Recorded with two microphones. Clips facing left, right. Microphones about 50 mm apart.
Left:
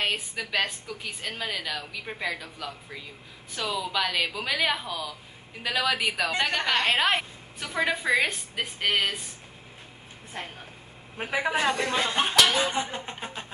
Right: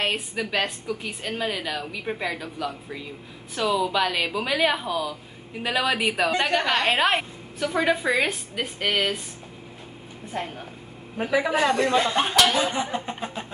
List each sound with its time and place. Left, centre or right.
0.0 s a woman's voice: centre
11.2 s a woman's voice: left
11.9 s a woman's voice: centre
12.7 s a woman's voice: centre
13.2 s a sound: centre